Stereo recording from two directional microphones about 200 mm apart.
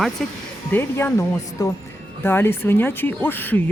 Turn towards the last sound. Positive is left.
turn(degrees=10)  # may be behind; listen again after turning